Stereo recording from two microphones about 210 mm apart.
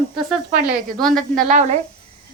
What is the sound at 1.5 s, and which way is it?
Speech, 35° right (ahead or behind).